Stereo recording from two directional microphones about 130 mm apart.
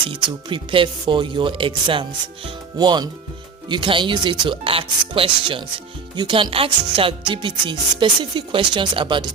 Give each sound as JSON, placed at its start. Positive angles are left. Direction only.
{"t": 0.1, "sound": "speech", "side_deg": -40}